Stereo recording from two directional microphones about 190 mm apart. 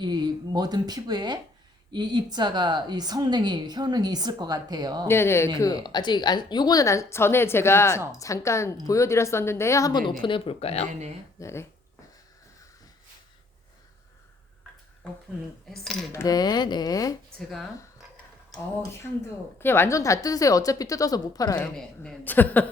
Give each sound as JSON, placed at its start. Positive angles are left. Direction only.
{"t": 0.0, "sound": "a woman's voice", "side_deg": -20}
{"t": 5.0, "sound": "a woman's voice", "side_deg": 15}
{"t": 11.3, "sound": "a woman's voice", "side_deg": 15}
{"t": 15.7, "sound": "cutlery", "side_deg": 0}
{"t": 16.1, "sound": "speech", "side_deg": 20}
{"t": 19.5, "sound": "a woman's voice", "side_deg": 10}
{"t": 21.8, "sound": "a woman's voice", "side_deg": 5}